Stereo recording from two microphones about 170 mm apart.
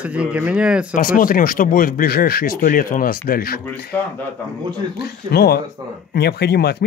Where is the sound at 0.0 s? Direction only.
5° right (ahead or behind).